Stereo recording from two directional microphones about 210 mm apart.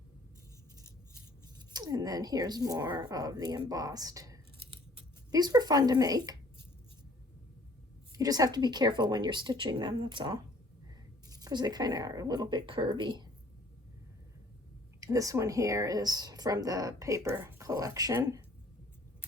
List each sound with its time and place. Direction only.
1.5 s speech: 20° right (ahead or behind)
3.7 s a sound: 15° right (ahead or behind)
4.9 s speech: 20° right (ahead or behind)
8.1 s speech: 15° right (ahead or behind)
15.0 s speech: 15° right (ahead or behind)